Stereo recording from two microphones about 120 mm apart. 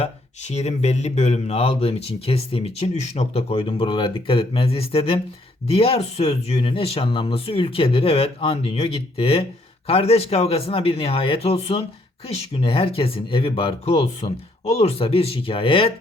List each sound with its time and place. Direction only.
0.0 s speech: 65° left (ahead or behind); by 15.9 s 50° left (ahead or behind)